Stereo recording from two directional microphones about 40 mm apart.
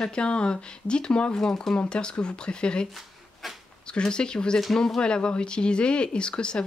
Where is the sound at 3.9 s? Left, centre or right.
Left.